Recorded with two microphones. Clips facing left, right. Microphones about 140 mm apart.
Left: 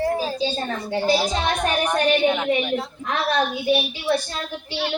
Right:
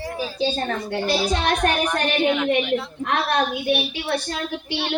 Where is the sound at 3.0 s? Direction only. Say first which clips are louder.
Left 1 dB; 65° right (ahead or behind).